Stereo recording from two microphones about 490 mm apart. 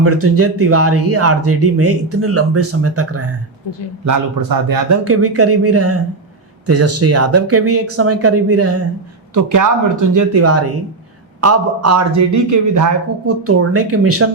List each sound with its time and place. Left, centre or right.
0.0 s speech: right
4.0 s a man's voice: right
5.0 s a man's voice: right